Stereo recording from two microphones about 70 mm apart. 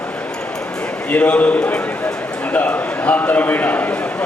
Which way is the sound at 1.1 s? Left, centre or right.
Left.